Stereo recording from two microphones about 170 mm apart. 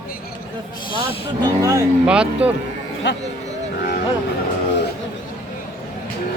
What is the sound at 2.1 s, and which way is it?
Speech, 5° right (ahead or behind).